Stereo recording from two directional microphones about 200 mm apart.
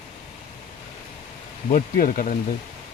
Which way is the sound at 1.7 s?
45° left (ahead or behind).